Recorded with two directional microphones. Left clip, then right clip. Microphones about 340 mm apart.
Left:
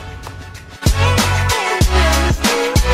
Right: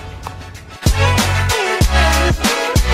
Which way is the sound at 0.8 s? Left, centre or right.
Centre.